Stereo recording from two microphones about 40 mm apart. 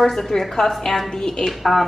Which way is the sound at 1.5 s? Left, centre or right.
Centre.